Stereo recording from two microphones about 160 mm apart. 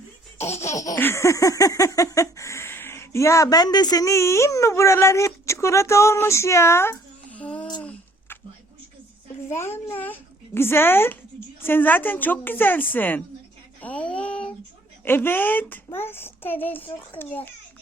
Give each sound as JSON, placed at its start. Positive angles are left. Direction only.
{"t": 0.3, "sound": "laughter", "side_deg": 45}
{"t": 0.7, "sound": "laughter", "side_deg": 20}
{"t": 7.8, "sound": "a sound", "side_deg": 10}
{"t": 9.6, "sound": "speech", "side_deg": 15}
{"t": 13.8, "sound": "a sound", "side_deg": 10}
{"t": 15.0, "sound": "speech", "side_deg": 15}